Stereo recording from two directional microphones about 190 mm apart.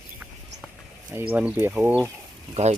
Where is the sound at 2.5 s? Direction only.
35° right (ahead or behind).